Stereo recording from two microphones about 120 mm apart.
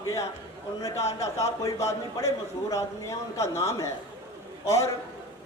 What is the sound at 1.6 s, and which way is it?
Speech, 25° left (ahead or behind).